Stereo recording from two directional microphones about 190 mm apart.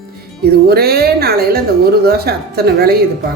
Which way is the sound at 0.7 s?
55° right (ahead or behind).